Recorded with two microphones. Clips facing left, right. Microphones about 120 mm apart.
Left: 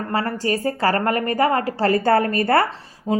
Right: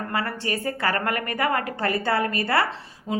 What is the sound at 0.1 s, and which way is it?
A woman's voice, 35° left (ahead or behind).